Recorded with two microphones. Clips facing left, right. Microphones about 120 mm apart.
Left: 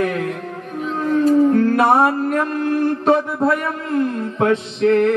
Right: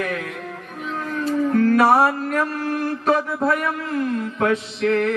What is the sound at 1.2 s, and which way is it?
Music, 30° left (ahead or behind).